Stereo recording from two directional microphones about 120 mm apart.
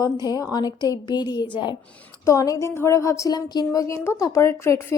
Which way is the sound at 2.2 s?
25° left (ahead or behind).